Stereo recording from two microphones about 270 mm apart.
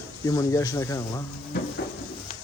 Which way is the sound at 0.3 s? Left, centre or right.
Centre.